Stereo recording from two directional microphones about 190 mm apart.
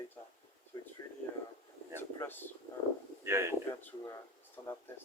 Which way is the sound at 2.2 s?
10° left (ahead or behind).